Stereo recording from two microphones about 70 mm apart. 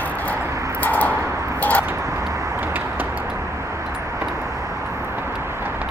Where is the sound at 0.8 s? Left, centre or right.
Left.